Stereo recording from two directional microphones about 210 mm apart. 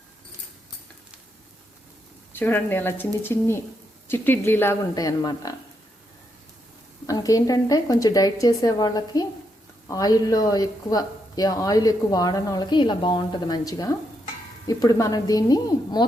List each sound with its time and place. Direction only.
2.3 s speech: 10° left (ahead or behind)
7.1 s speech: 15° left (ahead or behind)